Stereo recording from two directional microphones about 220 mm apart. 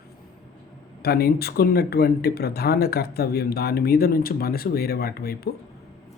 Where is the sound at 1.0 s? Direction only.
45° left (ahead or behind).